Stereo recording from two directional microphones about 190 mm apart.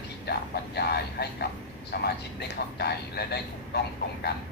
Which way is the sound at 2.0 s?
55° left (ahead or behind).